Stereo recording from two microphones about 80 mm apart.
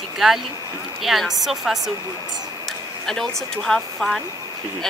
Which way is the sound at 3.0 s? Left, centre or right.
Centre.